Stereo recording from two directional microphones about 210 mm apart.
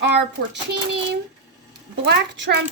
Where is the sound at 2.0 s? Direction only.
55° right (ahead or behind).